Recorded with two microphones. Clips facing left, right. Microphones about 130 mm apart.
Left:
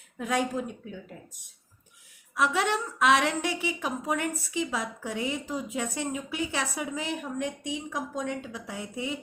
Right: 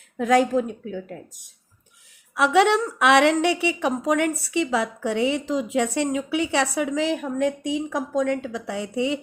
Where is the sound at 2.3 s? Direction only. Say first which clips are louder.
Right 8 dB; 70° right (ahead or behind).